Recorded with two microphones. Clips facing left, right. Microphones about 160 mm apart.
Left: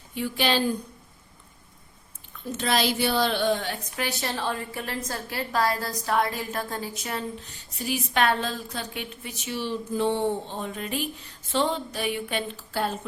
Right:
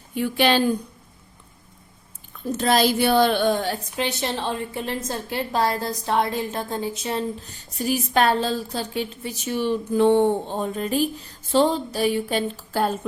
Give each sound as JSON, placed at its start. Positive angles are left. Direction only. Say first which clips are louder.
{"t": 0.1, "sound": "a woman's voice", "louder": "right 5 dB", "side_deg": -55}
{"t": 2.6, "sound": "speech", "louder": "right 5 dB", "side_deg": -40}
{"t": 3.9, "sound": "a woman's voice", "louder": "right 2 dB", "side_deg": -20}
{"t": 7.8, "sound": "speech", "louder": "right 5 dB", "side_deg": -40}
{"t": 9.5, "sound": "speech", "louder": "right 6 dB", "side_deg": -55}